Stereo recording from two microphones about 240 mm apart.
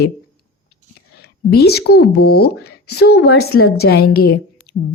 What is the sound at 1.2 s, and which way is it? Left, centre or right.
A woman's voice, left.